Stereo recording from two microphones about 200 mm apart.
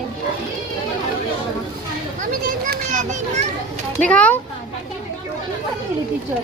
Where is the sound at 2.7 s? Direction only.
40° right (ahead or behind).